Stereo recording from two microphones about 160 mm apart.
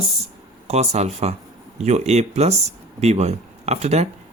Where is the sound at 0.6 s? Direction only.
40° right (ahead or behind).